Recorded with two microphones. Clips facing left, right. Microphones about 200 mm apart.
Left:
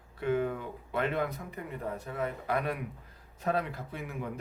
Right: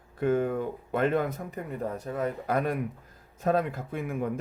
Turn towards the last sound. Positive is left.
turn(degrees=-50)  # may be behind; listen again after turning